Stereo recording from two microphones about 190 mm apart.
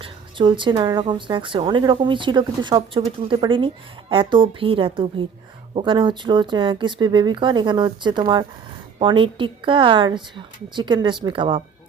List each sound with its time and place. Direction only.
0.0 s a woman's voice: 25° right (ahead or behind)